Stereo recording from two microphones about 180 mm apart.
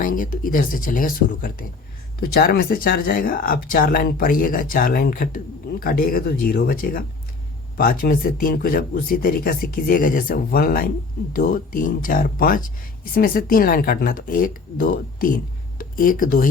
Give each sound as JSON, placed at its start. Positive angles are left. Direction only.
{"t": 0.0, "sound": "speech", "side_deg": 50}